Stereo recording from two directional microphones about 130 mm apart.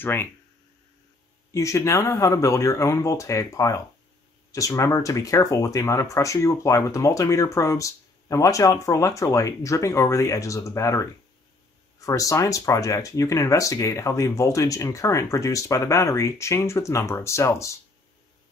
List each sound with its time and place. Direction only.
0.0 s speech: 15° left (ahead or behind)
1.5 s speech: 25° left (ahead or behind)